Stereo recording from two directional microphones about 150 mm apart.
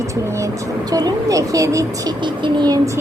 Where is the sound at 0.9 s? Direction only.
25° right (ahead or behind).